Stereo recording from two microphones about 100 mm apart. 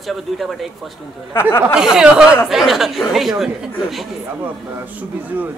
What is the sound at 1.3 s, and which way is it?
Speech, 25° left (ahead or behind).